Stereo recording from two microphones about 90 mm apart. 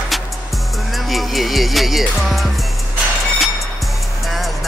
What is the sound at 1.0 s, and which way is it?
Speech, centre (ahead or behind).